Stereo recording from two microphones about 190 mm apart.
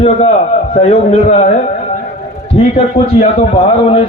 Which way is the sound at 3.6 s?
30° left (ahead or behind).